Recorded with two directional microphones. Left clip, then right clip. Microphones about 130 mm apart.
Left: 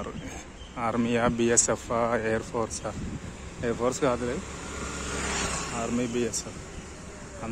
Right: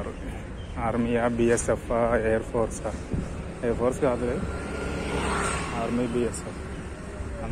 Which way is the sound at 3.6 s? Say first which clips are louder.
Right 2 dB; 55° left (ahead or behind).